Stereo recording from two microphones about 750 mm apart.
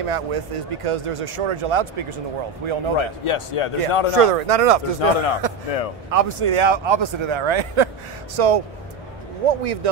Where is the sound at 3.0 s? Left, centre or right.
Left.